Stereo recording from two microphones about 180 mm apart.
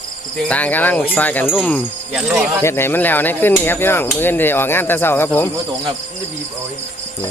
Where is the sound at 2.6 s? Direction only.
15° left (ahead or behind).